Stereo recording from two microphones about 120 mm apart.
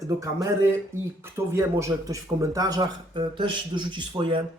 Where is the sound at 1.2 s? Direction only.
25° right (ahead or behind).